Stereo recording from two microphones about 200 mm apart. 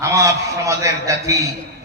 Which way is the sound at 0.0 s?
15° right (ahead or behind).